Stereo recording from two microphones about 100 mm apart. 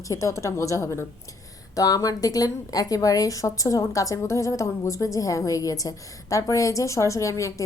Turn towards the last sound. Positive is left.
turn(degrees=30)  # may be behind; listen again after turning